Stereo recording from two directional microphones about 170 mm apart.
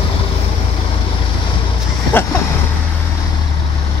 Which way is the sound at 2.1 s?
10° left (ahead or behind).